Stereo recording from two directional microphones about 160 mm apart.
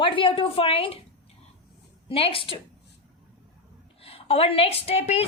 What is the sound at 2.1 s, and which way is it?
Speech, 35° left (ahead or behind).